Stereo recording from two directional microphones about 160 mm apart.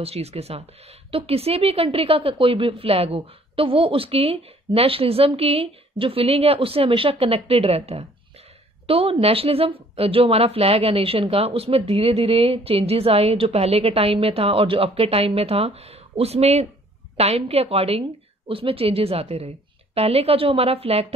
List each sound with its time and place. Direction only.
0.0 s a woman's voice: 40° right (ahead or behind)